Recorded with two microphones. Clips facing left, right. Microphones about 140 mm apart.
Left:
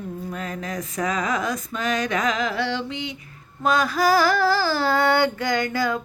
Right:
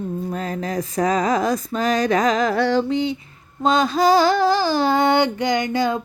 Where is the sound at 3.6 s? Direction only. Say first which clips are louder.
Right 3 dB; 25° right (ahead or behind).